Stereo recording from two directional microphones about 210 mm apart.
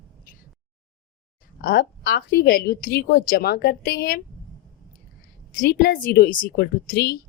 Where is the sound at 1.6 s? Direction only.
45° left (ahead or behind).